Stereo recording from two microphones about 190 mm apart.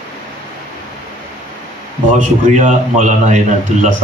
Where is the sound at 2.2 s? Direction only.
40° right (ahead or behind).